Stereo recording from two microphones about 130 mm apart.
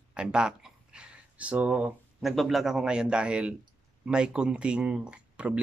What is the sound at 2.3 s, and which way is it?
Speech, centre (ahead or behind).